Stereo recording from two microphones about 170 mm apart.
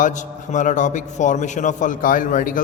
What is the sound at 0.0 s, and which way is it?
A man's voice, 45° left (ahead or behind).